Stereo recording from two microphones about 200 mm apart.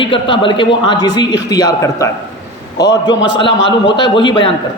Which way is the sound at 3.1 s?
70° left (ahead or behind).